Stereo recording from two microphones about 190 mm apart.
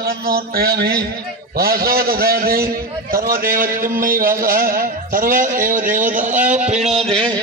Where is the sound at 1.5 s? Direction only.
50° right (ahead or behind).